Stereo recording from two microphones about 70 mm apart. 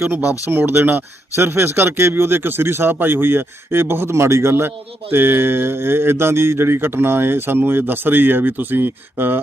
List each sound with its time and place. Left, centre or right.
0.0 s speech: right